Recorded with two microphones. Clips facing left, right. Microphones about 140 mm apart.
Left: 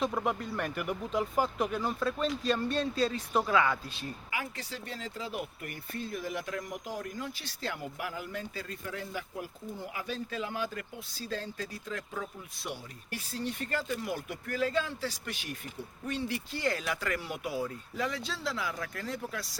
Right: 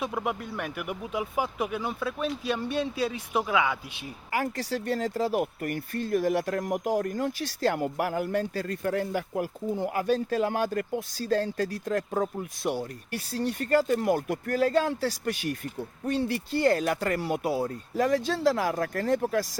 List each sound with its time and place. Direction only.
0.0 s speech: 5° right (ahead or behind)
4.3 s speech: 45° right (ahead or behind)
7.8 s speech: 55° right (ahead or behind)
16.1 s speech: 60° right (ahead or behind)
16.6 s speech: 45° right (ahead or behind)